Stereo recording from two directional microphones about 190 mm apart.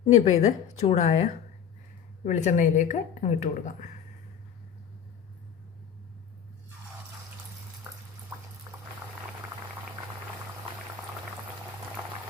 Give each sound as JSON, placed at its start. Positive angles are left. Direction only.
{"t": 0.1, "sound": "a woman's voice", "side_deg": 35}